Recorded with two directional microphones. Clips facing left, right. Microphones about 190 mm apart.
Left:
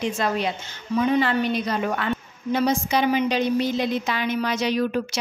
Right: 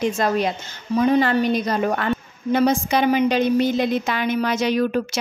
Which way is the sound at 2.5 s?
55° right (ahead or behind).